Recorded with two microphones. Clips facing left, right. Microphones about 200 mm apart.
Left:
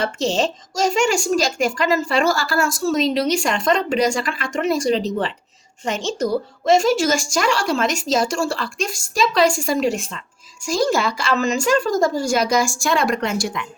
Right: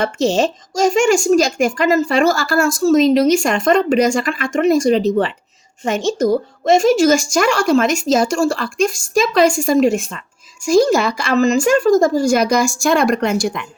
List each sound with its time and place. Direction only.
0.0 s speech: 50° right (ahead or behind)